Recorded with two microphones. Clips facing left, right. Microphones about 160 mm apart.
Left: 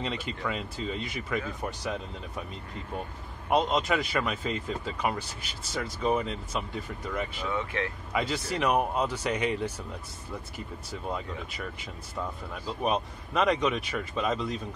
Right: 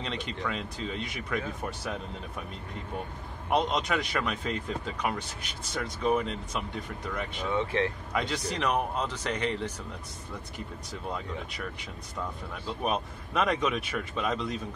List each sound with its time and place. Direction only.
0.0 s speech: 5° left (ahead or behind)
3.4 s speech: centre (ahead or behind)
7.5 s speech: 30° right (ahead or behind)
8.1 s speech: 5° left (ahead or behind)
10.9 s speech: centre (ahead or behind)
12.6 s speech: centre (ahead or behind)